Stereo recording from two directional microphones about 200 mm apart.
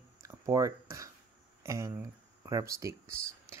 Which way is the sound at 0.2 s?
15° right (ahead or behind).